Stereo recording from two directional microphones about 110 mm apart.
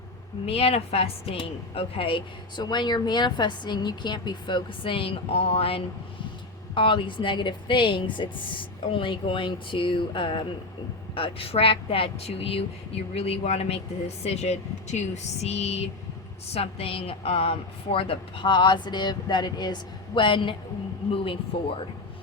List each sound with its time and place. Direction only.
0.4 s a woman's voice: 65° left (ahead or behind)
6.7 s a woman's voice: 50° left (ahead or behind); by 15.9 s 75° left (ahead or behind)
16.6 s a woman's voice: 60° left (ahead or behind)